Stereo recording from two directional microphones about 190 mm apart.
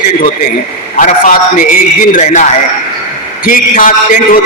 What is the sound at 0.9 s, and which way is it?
A man's voice, 45° left (ahead or behind).